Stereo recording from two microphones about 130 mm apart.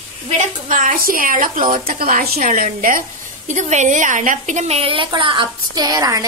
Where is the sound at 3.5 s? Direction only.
65° right (ahead or behind).